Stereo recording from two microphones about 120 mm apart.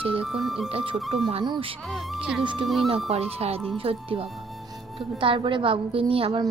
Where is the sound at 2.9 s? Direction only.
60° right (ahead or behind).